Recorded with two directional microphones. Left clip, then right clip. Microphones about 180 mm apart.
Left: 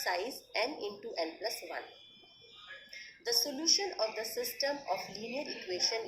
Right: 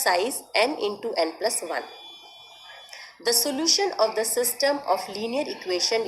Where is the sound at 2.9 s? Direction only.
25° right (ahead or behind).